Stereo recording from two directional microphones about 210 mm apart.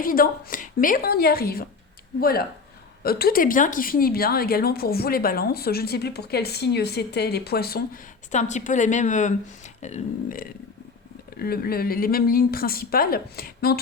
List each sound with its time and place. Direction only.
0.0 s speech: 45° left (ahead or behind)
3.0 s speech: 45° left (ahead or behind)
8.3 s a woman's voice: 35° left (ahead or behind)